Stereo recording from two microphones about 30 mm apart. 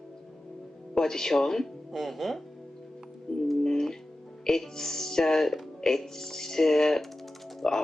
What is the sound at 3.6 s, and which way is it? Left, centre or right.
Music, centre.